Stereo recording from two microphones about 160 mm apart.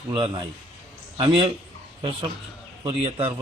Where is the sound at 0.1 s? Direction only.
30° right (ahead or behind).